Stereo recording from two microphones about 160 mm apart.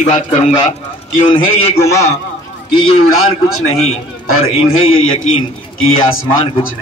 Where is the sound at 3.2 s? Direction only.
40° left (ahead or behind).